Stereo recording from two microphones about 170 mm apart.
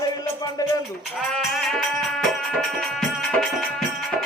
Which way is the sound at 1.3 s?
5° left (ahead or behind).